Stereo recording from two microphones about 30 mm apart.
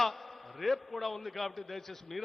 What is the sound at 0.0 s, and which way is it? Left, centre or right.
A man's voice, centre.